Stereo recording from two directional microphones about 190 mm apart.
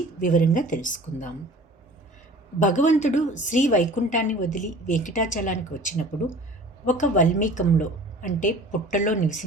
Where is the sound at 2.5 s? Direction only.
40° left (ahead or behind).